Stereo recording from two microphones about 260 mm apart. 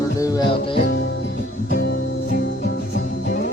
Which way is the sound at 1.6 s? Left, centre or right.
Left.